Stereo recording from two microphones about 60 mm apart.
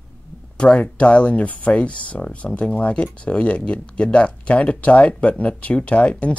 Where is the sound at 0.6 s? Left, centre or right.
Centre.